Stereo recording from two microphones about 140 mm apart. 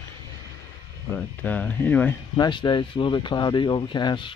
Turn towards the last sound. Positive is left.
turn(degrees=35)  # may be behind; listen again after turning